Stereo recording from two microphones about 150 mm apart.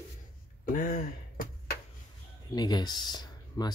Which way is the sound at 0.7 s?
65° left (ahead or behind).